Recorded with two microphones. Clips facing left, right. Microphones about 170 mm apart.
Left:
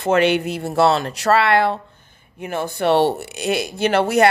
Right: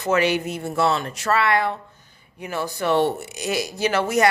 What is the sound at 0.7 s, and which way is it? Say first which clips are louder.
Speech: left 5 dB; 80° left.